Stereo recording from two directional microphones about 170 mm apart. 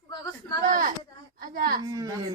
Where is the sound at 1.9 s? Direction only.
20° right (ahead or behind).